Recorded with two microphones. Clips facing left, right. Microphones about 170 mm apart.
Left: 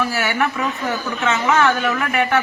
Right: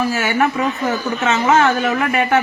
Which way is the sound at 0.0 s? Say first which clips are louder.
Right 3 dB; 40° right (ahead or behind).